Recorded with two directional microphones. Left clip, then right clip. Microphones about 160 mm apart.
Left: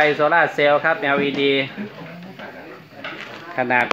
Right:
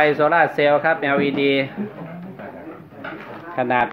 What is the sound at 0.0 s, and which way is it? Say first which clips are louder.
Speech: even; 5° left (ahead or behind).